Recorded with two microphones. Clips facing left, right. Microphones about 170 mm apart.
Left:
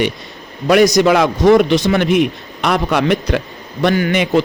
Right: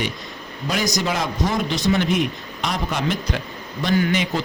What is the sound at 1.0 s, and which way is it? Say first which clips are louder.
A man's voice: left 12 dB; 70° left (ahead or behind).